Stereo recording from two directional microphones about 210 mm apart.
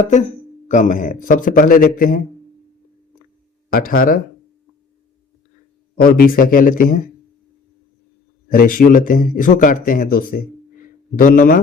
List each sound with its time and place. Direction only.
0.7 s a man's voice: 35° left (ahead or behind)
3.7 s speech: 45° left (ahead or behind)
6.0 s speech: 45° left (ahead or behind)
8.4 s a man's voice: 40° left (ahead or behind)